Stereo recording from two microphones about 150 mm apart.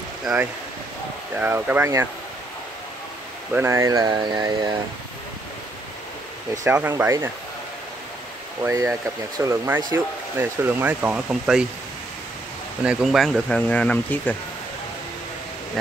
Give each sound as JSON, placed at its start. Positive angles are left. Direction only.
{"t": 0.2, "sound": "speech", "side_deg": -5}
{"t": 3.5, "sound": "speech", "side_deg": -15}
{"t": 6.6, "sound": "speech", "side_deg": -15}
{"t": 8.6, "sound": "speech", "side_deg": -20}
{"t": 12.8, "sound": "speech", "side_deg": 0}